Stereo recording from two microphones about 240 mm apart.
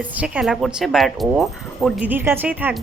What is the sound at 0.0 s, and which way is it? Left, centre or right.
Speech, centre.